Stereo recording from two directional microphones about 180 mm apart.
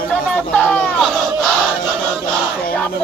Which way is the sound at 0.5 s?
5° left (ahead or behind).